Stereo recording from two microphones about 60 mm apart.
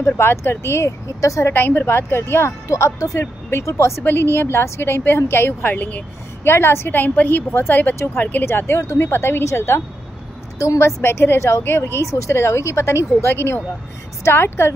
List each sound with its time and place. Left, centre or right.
0.0 s a woman's voice: left
1.5 s a woman's voice: left
2.7 s speech: left
4.0 s a woman's voice: left
6.4 s a woman's voice: left
8.5 s a woman's voice: left
9.4 s a woman's voice: left